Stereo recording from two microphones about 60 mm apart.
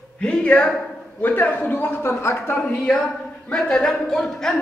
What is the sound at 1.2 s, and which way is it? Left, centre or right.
Speech, left.